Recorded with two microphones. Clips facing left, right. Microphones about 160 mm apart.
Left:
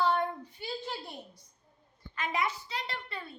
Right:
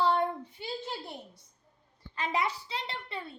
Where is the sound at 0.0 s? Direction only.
30° right (ahead or behind).